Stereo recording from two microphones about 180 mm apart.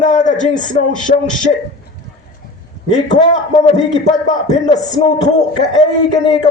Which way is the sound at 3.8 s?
40° left (ahead or behind).